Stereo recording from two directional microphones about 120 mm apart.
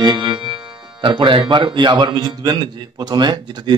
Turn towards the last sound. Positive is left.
turn(degrees=-40)  # may be behind; listen again after turning